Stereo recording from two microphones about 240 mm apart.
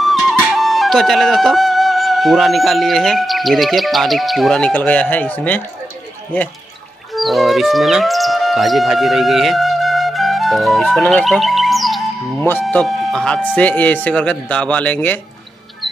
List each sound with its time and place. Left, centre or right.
0.0 s speech: centre
7.2 s speech: centre